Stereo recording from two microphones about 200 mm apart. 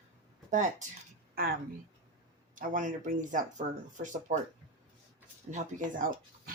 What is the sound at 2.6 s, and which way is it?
Speech, 40° right (ahead or behind).